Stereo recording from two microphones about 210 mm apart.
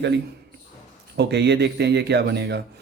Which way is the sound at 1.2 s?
50° right (ahead or behind).